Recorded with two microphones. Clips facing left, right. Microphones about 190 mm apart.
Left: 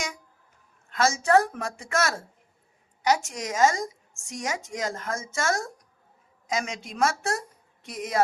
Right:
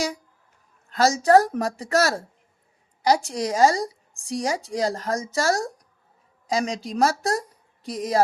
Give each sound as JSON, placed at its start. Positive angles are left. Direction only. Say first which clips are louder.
{"t": 0.9, "sound": "a woman's voice", "louder": "right 5 dB", "side_deg": -35}